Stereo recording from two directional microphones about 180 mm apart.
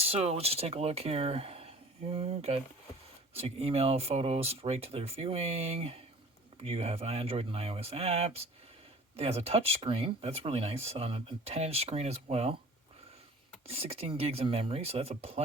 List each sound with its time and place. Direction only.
0.0 s speech: 35° right (ahead or behind)
13.7 s speech: 35° right (ahead or behind)